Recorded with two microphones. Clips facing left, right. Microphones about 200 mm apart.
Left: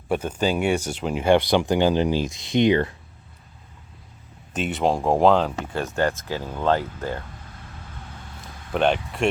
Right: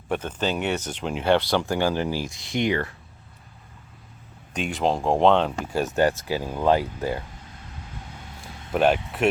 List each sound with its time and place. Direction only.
0.1 s speech: 10° left (ahead or behind)
4.5 s speech: 5° left (ahead or behind)
5.7 s speech: 15° right (ahead or behind)
8.7 s speech: 5° right (ahead or behind)